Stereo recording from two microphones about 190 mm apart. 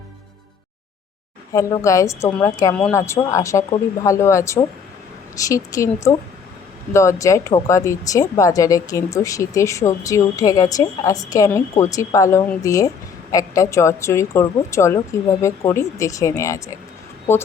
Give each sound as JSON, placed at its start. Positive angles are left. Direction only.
{"t": 1.5, "sound": "speech", "side_deg": 15}